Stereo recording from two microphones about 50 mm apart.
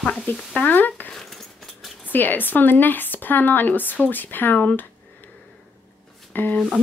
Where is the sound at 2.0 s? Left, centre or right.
Left.